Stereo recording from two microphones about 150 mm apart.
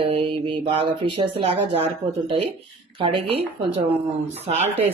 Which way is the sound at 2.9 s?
35° right (ahead or behind).